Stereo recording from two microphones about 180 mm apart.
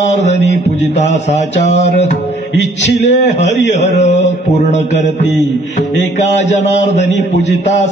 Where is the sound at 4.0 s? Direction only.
40° left (ahead or behind).